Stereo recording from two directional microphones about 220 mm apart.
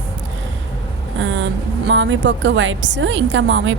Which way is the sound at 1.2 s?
60° right (ahead or behind).